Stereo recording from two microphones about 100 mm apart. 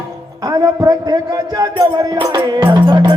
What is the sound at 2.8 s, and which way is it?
Music, 55° right (ahead or behind).